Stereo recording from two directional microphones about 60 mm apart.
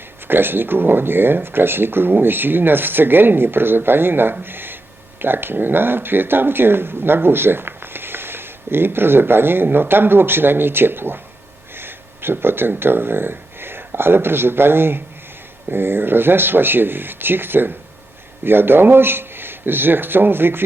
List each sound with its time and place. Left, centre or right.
0.3 s speech: right